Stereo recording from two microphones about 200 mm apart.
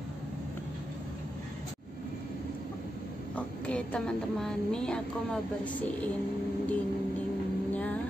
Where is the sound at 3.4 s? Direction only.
5° left (ahead or behind).